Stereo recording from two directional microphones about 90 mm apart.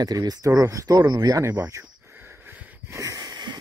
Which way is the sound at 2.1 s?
25° right (ahead or behind).